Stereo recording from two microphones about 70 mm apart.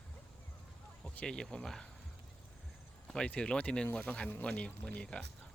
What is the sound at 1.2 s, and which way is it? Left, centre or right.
Speech, centre.